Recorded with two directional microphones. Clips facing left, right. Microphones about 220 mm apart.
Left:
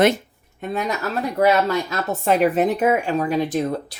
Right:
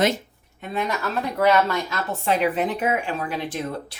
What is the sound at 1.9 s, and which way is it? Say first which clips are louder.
Speech: left 4 dB; 45° left (ahead or behind).